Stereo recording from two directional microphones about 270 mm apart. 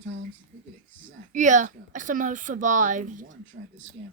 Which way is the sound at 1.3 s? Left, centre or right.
Right.